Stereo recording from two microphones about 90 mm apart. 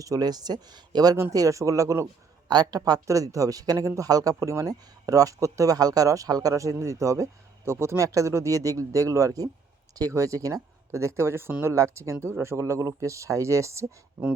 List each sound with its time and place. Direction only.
0.0 s speech: 45° right (ahead or behind)
1.1 s speech: 35° right (ahead or behind)
2.5 s speech: 50° right (ahead or behind)